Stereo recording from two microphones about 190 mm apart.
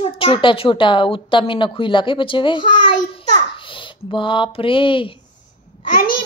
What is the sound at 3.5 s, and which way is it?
Speech, 25° left (ahead or behind).